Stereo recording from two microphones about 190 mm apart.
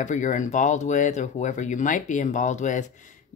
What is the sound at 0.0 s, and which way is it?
Speech, 40° left (ahead or behind).